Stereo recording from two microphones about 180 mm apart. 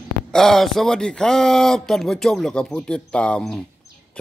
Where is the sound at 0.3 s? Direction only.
Centre (ahead or behind).